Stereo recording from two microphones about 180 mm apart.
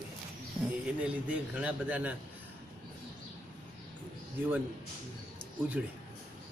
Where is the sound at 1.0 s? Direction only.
5° right (ahead or behind).